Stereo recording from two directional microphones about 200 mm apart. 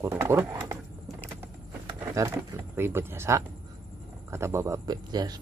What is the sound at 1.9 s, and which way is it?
Speech, 15° right (ahead or behind).